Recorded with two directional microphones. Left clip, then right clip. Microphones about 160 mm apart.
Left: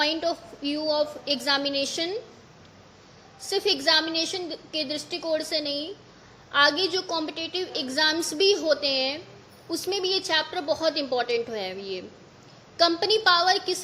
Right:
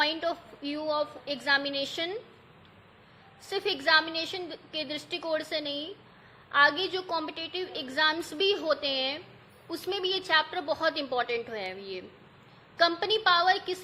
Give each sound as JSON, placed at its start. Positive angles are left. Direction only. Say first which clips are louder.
{"t": 0.0, "sound": "a woman's voice", "louder": "left 3 dB", "side_deg": 15}
{"t": 3.5, "sound": "a woman's voice", "louder": "left 3 dB", "side_deg": 20}